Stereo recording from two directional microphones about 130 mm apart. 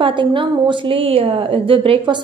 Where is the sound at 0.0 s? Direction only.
40° right (ahead or behind).